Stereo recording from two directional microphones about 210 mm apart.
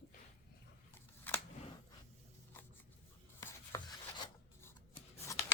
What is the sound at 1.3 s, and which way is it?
Scissors, 10° left (ahead or behind).